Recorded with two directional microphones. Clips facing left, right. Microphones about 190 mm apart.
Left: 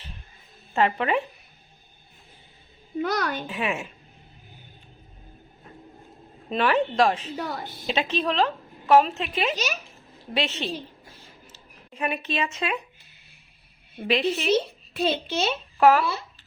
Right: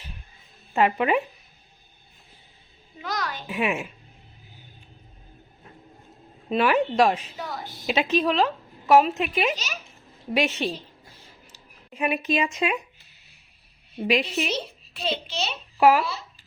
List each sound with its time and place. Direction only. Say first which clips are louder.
0.7 s a woman's voice: right 2 dB; 10° right (ahead or behind)
3.0 s speech: left 5 dB; 55° left (ahead or behind)
3.5 s a woman's voice: right 2 dB; 10° right (ahead or behind)
6.5 s a woman's voice: right 1 dB; 10° right (ahead or behind)
7.3 s speech: left 3 dB; 55° left (ahead or behind)
7.9 s a woman's voice: right 3 dB; 10° right (ahead or behind)
14.0 s a woman's voice: right 1 dB; 10° right (ahead or behind)
14.3 s speech: left 6 dB; 50° left (ahead or behind)
15.8 s a woman's voice: even; 10° right (ahead or behind)